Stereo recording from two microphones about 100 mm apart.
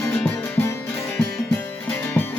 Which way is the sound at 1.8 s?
20° left (ahead or behind).